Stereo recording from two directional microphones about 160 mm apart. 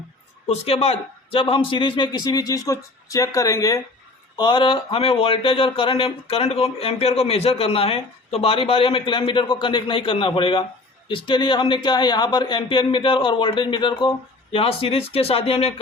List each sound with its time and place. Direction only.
0.4 s a man's voice: 40° left (ahead or behind)